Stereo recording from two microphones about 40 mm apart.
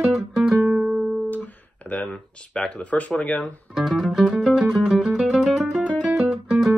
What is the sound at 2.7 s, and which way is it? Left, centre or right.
Speech, left.